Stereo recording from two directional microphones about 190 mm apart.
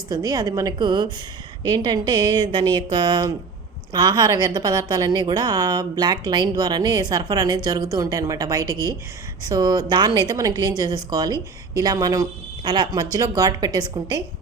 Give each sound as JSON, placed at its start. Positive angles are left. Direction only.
{"t": 0.1, "sound": "a woman's voice", "side_deg": -20}